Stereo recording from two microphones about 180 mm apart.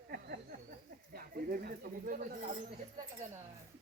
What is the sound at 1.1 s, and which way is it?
Speech, 55° right (ahead or behind).